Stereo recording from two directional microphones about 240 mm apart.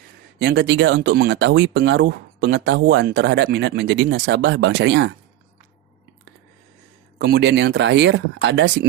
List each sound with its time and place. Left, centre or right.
0.3 s speech: right
7.2 s speech: right